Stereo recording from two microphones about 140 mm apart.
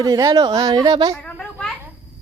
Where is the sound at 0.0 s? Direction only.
25° right (ahead or behind).